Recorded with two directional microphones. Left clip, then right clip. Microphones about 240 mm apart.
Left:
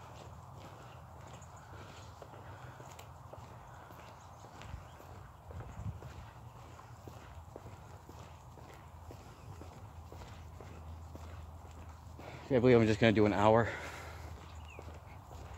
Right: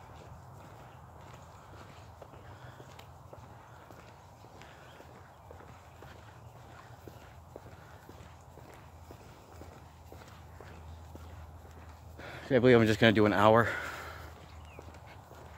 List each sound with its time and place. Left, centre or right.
12.2 s speech: right